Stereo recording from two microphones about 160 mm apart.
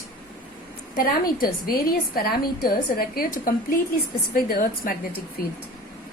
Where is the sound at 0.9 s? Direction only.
65° left (ahead or behind).